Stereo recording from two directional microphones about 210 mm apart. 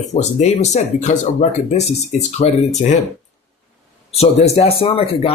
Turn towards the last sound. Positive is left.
turn(degrees=25)  # may be behind; listen again after turning